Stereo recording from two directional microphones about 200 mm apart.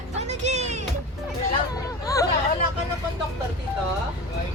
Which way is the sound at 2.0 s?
15° left (ahead or behind).